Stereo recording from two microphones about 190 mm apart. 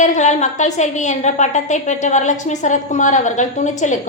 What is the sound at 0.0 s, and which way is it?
A woman's voice, 40° left (ahead or behind).